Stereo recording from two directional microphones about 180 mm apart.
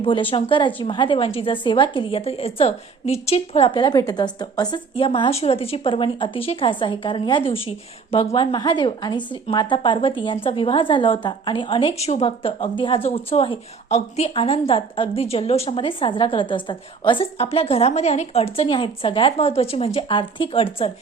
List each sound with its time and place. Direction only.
0.0 s a woman's voice: 30° left (ahead or behind)